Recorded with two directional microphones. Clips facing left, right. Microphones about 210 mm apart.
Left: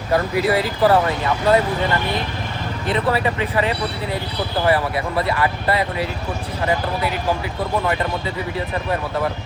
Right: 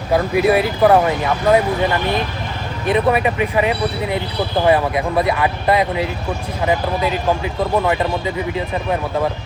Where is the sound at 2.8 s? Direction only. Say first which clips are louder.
Right 4 dB; 15° right (ahead or behind).